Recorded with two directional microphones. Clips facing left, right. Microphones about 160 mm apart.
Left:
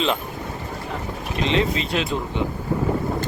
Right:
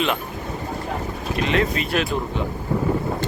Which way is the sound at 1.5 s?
25° left (ahead or behind).